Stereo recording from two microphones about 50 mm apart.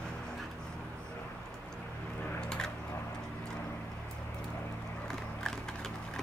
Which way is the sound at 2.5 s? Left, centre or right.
Centre.